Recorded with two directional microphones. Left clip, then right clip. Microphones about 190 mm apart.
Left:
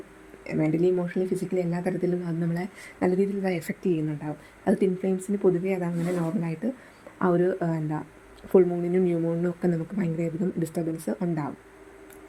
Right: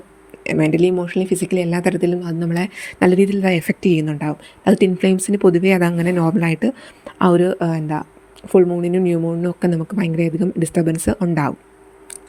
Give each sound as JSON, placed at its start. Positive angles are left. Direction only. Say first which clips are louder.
{"t": 0.4, "sound": "a woman's voice", "louder": "right 8 dB", "side_deg": -35}